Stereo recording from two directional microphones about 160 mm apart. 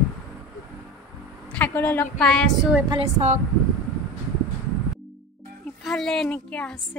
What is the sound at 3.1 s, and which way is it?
Speech, 50° right (ahead or behind).